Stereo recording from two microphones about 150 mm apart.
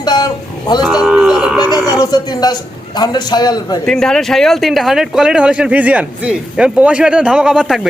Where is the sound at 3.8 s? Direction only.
5° left (ahead or behind).